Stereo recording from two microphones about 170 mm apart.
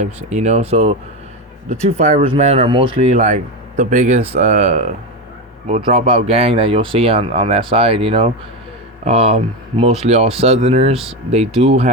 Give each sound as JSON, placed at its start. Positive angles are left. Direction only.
{"t": 0.0, "sound": "speech", "side_deg": -45}